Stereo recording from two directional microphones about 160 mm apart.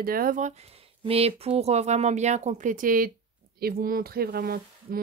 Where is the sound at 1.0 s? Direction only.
40° right (ahead or behind); by 5.0 s 70° right (ahead or behind).